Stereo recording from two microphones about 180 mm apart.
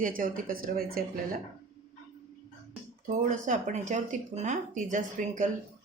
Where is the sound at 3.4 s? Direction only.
45° right (ahead or behind).